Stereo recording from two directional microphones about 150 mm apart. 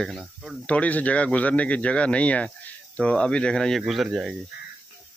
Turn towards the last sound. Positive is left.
turn(degrees=0)  # may be behind; listen again after turning